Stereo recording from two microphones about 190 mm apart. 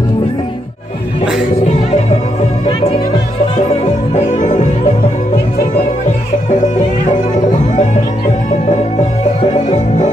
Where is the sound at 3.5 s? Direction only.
35° left (ahead or behind).